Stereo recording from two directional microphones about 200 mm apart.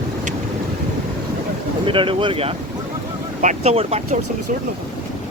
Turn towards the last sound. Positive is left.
turn(degrees=-30)  # may be behind; listen again after turning